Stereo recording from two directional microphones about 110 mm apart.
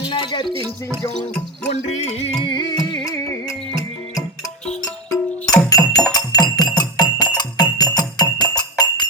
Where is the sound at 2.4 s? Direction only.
40° left (ahead or behind).